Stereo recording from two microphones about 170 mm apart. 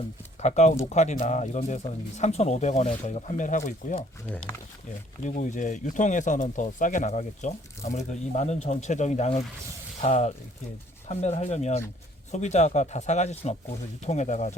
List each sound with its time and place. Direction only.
0.4 s speech: 45° left (ahead or behind)
5.2 s speech: 45° left (ahead or behind)